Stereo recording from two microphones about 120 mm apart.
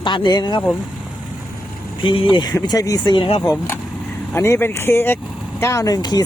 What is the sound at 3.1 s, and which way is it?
Speech, 45° left (ahead or behind).